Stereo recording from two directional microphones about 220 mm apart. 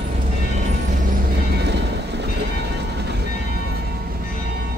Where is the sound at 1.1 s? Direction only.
50° right (ahead or behind).